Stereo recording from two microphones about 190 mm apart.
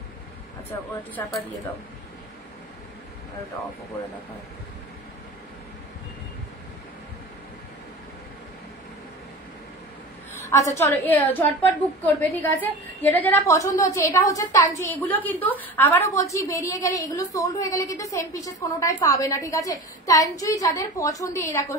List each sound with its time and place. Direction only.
0.7 s a woman's voice: 10° left (ahead or behind)
10.5 s a woman's voice: 15° left (ahead or behind)